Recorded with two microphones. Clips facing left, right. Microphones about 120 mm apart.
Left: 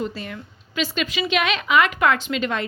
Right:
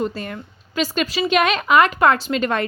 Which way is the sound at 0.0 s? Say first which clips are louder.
Right 4 dB; 45° right (ahead or behind).